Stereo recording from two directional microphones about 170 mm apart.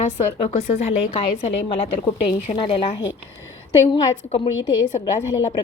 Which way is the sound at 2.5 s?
35° left (ahead or behind).